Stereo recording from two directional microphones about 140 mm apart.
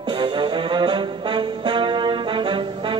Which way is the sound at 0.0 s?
35° right (ahead or behind).